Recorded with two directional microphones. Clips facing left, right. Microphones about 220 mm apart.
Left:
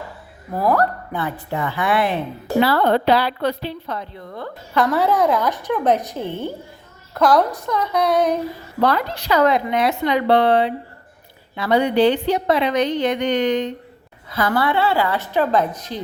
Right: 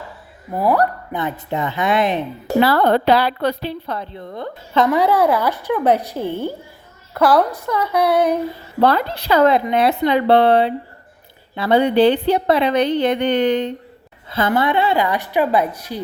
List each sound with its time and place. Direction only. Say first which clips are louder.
0.5 s a woman's voice: right 1 dB; 15° right (ahead or behind)
2.6 s a woman's voice: right 2 dB; 45° right (ahead or behind); by 6.5 s 10° right (ahead or behind)
7.1 s a sound: right 1 dB; 10° right (ahead or behind)
8.8 s a woman's voice: right 3 dB; 30° right (ahead or behind); by 16.0 s 10° right (ahead or behind)